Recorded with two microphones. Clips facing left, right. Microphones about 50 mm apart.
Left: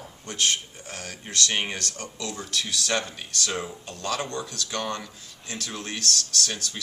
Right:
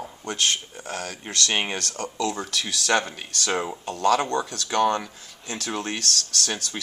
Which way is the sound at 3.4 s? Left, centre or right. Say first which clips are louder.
Right 5 dB; right.